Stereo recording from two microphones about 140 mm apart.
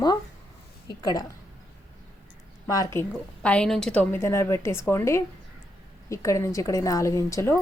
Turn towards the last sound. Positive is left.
turn(degrees=20)  # may be behind; listen again after turning